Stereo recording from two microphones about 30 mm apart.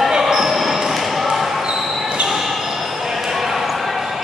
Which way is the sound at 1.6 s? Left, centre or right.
Right.